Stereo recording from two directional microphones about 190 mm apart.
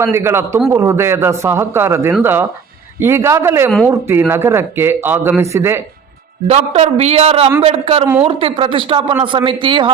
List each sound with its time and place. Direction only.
0.0 s a man's voice: 15° right (ahead or behind)
6.5 s a man's voice: 35° right (ahead or behind)